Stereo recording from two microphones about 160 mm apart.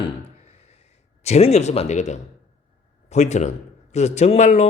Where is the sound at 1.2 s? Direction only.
40° left (ahead or behind).